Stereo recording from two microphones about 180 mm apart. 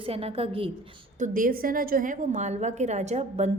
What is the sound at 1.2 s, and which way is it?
A woman's voice, 50° right (ahead or behind).